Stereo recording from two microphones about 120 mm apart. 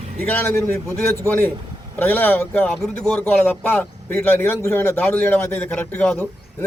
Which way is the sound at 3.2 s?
15° left (ahead or behind).